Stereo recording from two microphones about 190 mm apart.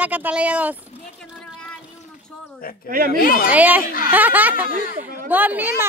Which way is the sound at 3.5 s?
10° right (ahead or behind).